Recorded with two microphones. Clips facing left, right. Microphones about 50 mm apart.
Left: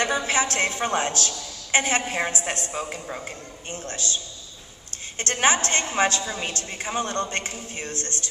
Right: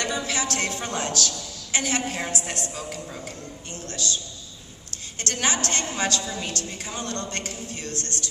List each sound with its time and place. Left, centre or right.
0.0 s a woman's voice: left
5.2 s a woman's voice: left